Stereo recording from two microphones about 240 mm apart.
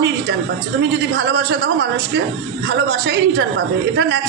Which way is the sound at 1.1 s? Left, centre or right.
Right.